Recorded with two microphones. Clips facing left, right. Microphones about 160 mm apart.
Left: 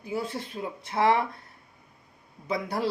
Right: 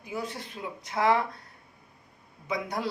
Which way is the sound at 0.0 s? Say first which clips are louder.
Left 4 dB; 30° left (ahead or behind).